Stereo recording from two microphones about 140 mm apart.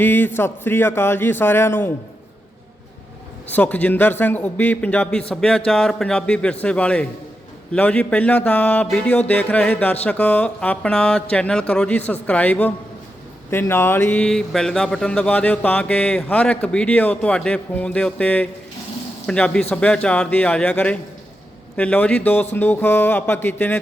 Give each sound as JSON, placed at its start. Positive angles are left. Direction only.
{"t": 0.0, "sound": "speech", "side_deg": 15}
{"t": 3.4, "sound": "speech", "side_deg": 10}